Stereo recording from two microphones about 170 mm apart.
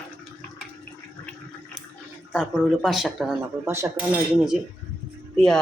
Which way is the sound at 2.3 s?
Centre (ahead or behind).